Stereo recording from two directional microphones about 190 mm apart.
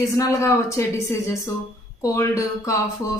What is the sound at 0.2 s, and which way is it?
A woman's voice, 15° left (ahead or behind).